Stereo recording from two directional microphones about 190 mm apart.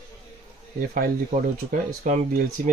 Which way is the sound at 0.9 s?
45° right (ahead or behind).